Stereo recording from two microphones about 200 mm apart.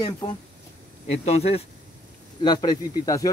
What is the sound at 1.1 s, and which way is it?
Speech, 30° left (ahead or behind).